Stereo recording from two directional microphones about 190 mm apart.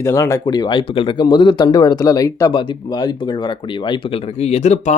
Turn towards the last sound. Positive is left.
turn(degrees=35)  # may be behind; listen again after turning